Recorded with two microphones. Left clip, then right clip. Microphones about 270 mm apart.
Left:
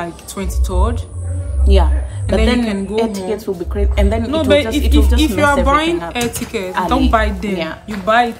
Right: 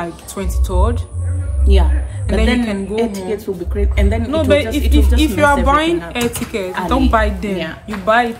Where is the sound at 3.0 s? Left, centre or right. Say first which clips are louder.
Left 2 dB; centre.